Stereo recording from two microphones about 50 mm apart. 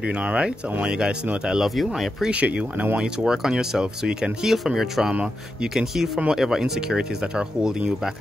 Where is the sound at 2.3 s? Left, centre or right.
Right.